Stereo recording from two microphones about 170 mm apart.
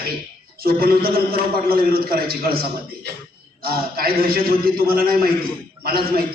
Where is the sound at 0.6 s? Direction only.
60° right (ahead or behind).